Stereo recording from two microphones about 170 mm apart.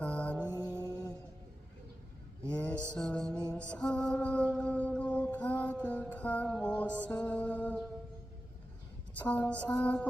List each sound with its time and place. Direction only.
0.0 s music: 10° left (ahead or behind)
0.3 s music: 15° right (ahead or behind)
2.5 s mantra: 5° left (ahead or behind)
9.1 s a woman's voice: 10° left (ahead or behind)